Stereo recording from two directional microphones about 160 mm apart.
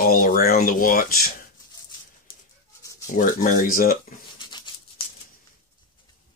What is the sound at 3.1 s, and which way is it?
Speech, 60° left (ahead or behind).